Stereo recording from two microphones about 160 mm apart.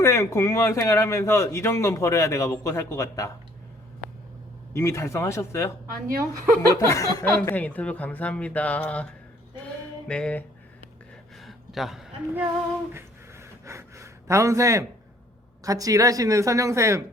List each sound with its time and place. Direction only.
0.0 s speech: 20° left (ahead or behind)
4.7 s speech: 15° left (ahead or behind)
5.9 s a woman's voice: 65° right (ahead or behind)
6.6 s chuckle: 20° left (ahead or behind)
7.4 s speech: 10° left (ahead or behind)
10.1 s speech: 5° left (ahead or behind)
11.3 s a sound: centre (ahead or behind)
12.9 s gasp: 15° right (ahead or behind)
15.6 s a woman's voice: 20° right (ahead or behind)